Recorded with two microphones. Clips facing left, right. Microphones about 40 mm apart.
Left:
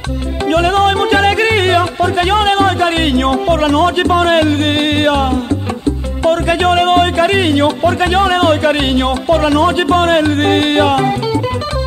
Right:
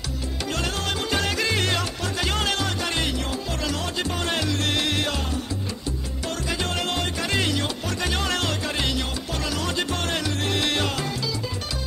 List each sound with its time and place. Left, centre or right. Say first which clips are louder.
0.5 s music: left 17 dB; left